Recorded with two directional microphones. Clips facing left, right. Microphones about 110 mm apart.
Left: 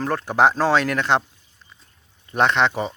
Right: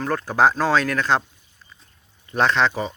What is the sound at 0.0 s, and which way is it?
Speech, 25° left (ahead or behind).